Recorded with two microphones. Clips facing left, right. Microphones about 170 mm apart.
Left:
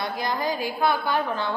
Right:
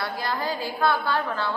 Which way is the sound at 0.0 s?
15° left (ahead or behind).